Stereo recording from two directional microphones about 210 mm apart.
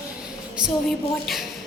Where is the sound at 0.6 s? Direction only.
20° right (ahead or behind).